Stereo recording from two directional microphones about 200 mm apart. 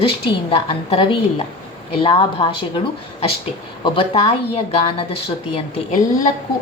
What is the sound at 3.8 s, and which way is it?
Speech, 30° left (ahead or behind).